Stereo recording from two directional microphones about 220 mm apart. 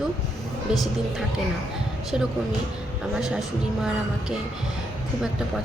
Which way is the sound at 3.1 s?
Centre (ahead or behind).